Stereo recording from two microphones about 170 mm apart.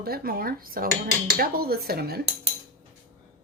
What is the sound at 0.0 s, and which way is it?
Speech, 60° right (ahead or behind).